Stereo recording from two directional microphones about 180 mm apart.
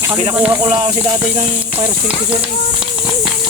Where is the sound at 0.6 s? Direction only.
30° right (ahead or behind).